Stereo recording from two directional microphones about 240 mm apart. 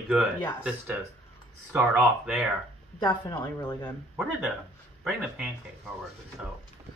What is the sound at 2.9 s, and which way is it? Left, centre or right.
Speech, centre.